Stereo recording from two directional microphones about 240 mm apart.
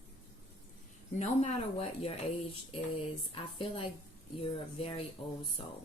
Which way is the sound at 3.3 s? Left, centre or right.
Left.